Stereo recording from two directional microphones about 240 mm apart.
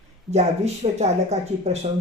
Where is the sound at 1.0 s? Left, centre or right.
Right.